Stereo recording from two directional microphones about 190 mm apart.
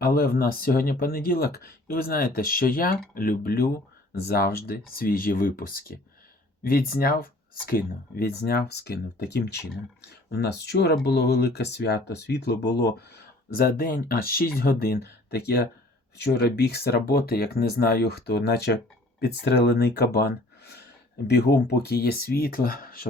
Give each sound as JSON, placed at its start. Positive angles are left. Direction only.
{"t": 0.0, "sound": "speech", "side_deg": 50}